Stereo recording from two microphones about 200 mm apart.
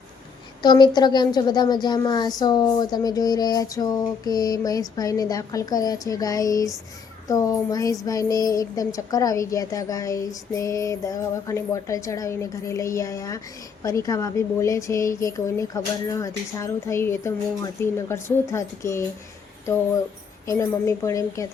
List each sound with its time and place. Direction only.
0.6 s a sound: 20° left (ahead or behind)
7.3 s speech: 15° left (ahead or behind)
20.5 s speech: 15° left (ahead or behind)